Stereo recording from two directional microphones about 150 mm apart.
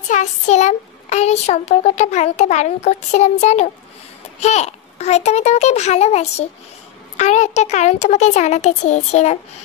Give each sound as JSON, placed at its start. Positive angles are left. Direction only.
{"t": 0.1, "sound": "a child's voice", "side_deg": 50}